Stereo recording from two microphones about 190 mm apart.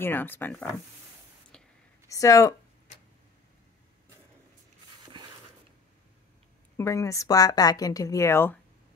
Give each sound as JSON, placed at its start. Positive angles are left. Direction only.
{"t": 0.0, "sound": "speech", "side_deg": 10}
{"t": 1.5, "sound": "whispering", "side_deg": 5}
{"t": 2.0, "sound": "speech", "side_deg": 15}
{"t": 6.8, "sound": "speech", "side_deg": 15}